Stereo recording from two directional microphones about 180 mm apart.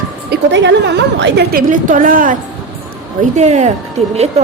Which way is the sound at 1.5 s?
45° right (ahead or behind).